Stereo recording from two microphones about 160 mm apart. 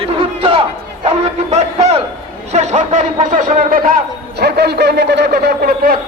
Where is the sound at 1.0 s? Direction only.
40° right (ahead or behind).